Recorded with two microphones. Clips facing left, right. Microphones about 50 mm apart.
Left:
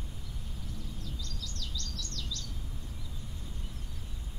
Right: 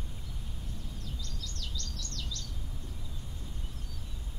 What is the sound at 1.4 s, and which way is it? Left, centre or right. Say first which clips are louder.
Bird vocalization: even; right.